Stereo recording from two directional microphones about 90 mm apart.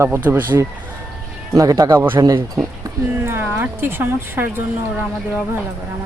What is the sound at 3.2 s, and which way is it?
Speech, 25° right (ahead or behind).